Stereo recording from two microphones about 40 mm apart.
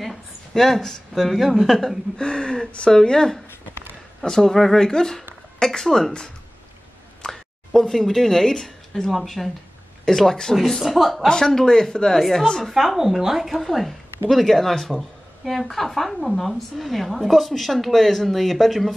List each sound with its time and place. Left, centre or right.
0.0 s speech: centre
2.1 s speech: left
7.2 s a woman's voice: centre
11.2 s speech: centre
12.2 s a woman's voice: centre